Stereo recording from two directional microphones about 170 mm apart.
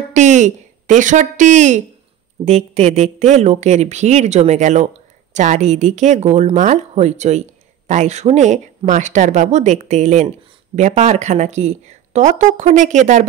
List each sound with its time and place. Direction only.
0.1 s speech: 45° right (ahead or behind)